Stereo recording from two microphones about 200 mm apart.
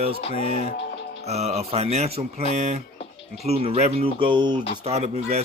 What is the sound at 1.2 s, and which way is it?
Speech, 30° right (ahead or behind).